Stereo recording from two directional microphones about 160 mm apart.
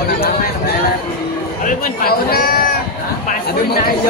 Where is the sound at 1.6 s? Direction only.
70° left (ahead or behind).